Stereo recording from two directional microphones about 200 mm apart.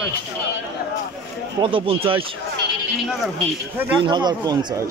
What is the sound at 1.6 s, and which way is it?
Speech, 25° right (ahead or behind).